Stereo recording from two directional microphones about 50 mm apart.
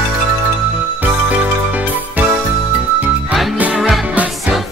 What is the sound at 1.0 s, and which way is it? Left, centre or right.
Music, right.